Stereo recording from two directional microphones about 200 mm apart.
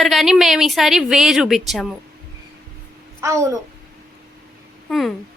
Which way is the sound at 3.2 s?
15° right (ahead or behind).